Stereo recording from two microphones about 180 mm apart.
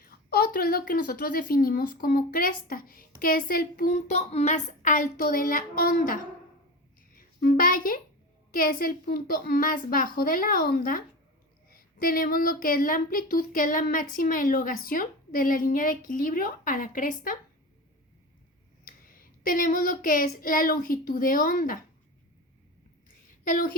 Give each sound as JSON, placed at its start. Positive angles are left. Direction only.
{"t": 0.0, "sound": "a woman's voice", "side_deg": 55}
{"t": 7.1, "sound": "music", "side_deg": 50}
{"t": 8.5, "sound": "a woman's voice", "side_deg": 50}
{"t": 19.4, "sound": "a woman's voice", "side_deg": 50}
{"t": 23.0, "sound": "a sound", "side_deg": 50}